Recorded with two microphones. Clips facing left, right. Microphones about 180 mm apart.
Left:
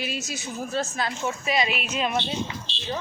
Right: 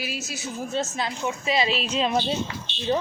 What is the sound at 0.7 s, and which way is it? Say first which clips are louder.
Speech: even; 25° right (ahead or behind).